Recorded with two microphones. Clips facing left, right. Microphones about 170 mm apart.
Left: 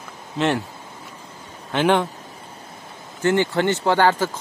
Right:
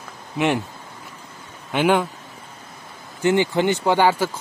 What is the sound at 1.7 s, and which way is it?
Speech, 10° right (ahead or behind).